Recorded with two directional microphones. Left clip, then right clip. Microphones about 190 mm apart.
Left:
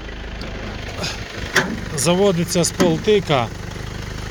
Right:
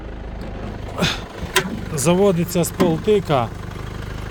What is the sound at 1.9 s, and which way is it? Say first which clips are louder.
Speech: right 1 dB; 25° right (ahead or behind).